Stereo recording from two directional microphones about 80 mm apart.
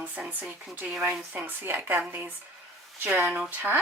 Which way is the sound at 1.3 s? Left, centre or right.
Right.